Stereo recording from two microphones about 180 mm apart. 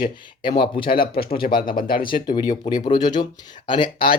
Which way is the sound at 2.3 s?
20° left (ahead or behind).